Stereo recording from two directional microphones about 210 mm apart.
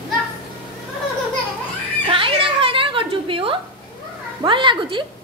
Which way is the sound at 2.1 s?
25° right (ahead or behind).